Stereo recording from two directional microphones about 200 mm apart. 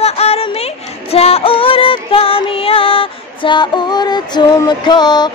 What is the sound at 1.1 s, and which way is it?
Music, 30° left (ahead or behind).